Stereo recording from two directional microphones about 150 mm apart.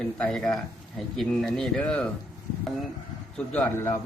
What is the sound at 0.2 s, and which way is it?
A man's voice, 5° left (ahead or behind).